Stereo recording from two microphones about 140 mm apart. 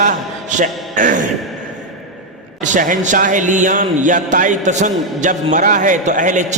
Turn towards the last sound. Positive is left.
turn(degrees=-65)  # may be behind; listen again after turning